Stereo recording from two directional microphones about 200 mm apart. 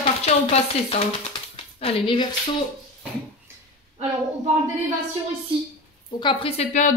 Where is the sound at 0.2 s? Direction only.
30° left (ahead or behind).